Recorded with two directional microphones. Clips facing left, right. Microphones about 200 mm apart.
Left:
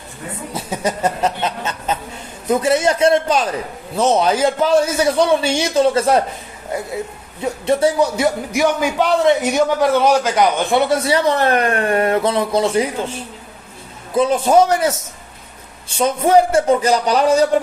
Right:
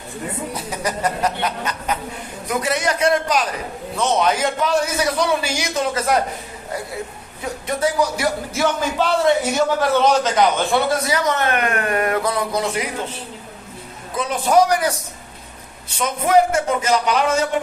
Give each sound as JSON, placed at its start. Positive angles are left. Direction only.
{"t": 0.5, "sound": "a man's voice", "side_deg": 25}
{"t": 7.4, "sound": "a man's voice", "side_deg": 30}
{"t": 10.9, "sound": "a man's voice", "side_deg": 30}
{"t": 14.2, "sound": "a man's voice", "side_deg": 30}
{"t": 16.0, "sound": "a man's voice", "side_deg": 30}